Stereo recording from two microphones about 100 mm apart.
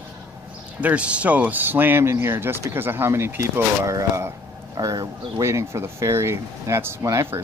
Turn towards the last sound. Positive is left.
turn(degrees=-30)  # may be behind; listen again after turning